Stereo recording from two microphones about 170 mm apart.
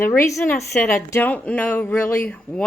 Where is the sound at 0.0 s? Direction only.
15° left (ahead or behind).